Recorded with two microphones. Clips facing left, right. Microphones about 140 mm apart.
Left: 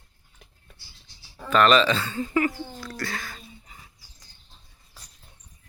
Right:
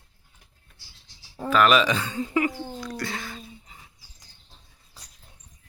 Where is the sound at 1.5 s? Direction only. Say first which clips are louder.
Left 1 dB; 5° right (ahead or behind).